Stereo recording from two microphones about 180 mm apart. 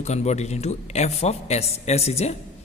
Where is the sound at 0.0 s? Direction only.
40° left (ahead or behind).